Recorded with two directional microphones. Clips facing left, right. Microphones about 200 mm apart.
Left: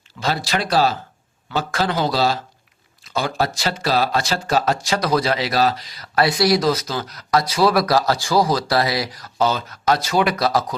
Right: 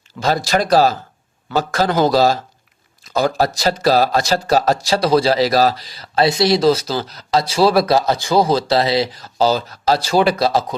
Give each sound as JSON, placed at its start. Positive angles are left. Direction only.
{"t": 0.2, "sound": "a man's voice", "side_deg": -45}